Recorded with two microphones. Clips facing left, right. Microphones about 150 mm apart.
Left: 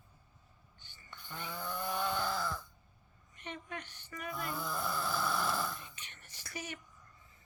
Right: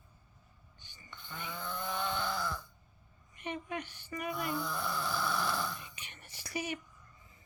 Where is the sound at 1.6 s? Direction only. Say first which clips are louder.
Left 1 dB; 10° left (ahead or behind).